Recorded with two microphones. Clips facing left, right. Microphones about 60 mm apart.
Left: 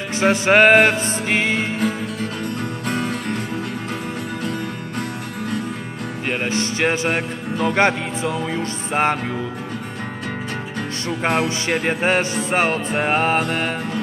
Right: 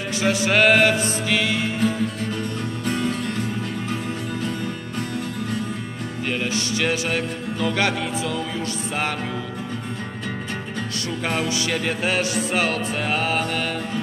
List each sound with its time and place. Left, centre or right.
0.1 s music: left
2.8 s music: left
6.2 s music: left
11.2 s music: left